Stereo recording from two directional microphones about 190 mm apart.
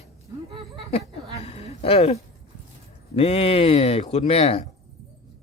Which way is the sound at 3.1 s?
30° left (ahead or behind).